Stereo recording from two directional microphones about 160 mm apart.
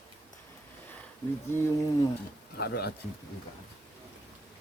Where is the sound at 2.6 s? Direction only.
85° left.